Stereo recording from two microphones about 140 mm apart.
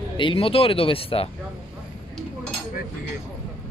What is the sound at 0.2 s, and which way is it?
Speech, 40° left (ahead or behind).